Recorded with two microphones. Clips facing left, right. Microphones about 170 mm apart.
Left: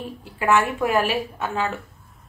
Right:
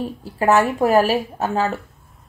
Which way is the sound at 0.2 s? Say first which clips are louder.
Right 4 dB; 40° right (ahead or behind).